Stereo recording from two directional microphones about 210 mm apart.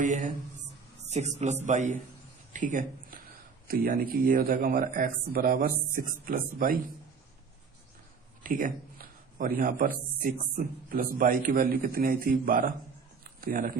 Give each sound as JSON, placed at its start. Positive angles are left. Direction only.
{"t": 0.0, "sound": "a man's voice", "side_deg": -35}
{"t": 8.4, "sound": "a man's voice", "side_deg": -40}